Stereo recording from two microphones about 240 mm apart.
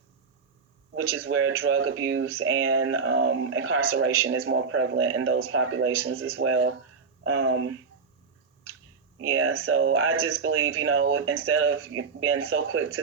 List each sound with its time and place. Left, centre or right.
0.9 s speech: right
9.2 s speech: right